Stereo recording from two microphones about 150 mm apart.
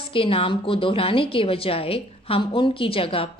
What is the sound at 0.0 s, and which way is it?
A woman's voice, 40° left (ahead or behind).